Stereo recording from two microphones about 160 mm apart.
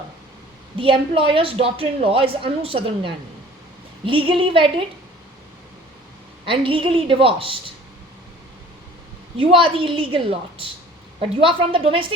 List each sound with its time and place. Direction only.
0.8 s a woman's voice: 35° right (ahead or behind)
6.4 s a woman's voice: 35° right (ahead or behind)
9.4 s a woman's voice: 35° right (ahead or behind)